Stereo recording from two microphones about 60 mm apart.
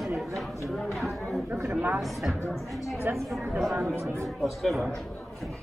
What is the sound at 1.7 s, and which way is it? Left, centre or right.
Speech, right.